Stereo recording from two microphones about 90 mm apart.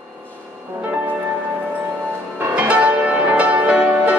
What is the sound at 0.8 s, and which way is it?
Music, 20° right (ahead or behind).